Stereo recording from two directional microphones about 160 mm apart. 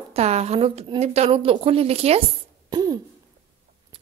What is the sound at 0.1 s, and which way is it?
A woman's voice, 40° right (ahead or behind).